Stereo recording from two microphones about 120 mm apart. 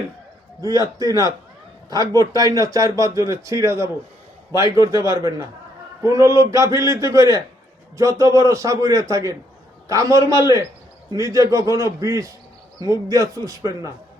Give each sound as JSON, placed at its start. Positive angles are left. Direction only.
{"t": 0.9, "sound": "speech", "side_deg": -30}